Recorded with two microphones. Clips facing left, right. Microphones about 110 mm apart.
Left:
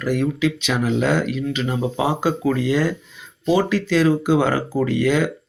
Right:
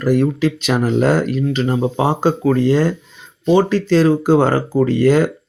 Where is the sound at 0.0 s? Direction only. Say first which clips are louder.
Right 5 dB; 40° right (ahead or behind).